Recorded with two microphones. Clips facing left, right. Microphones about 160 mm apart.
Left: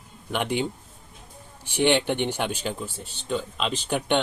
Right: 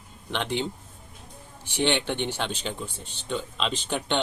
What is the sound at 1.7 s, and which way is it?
Speech, 15° left (ahead or behind).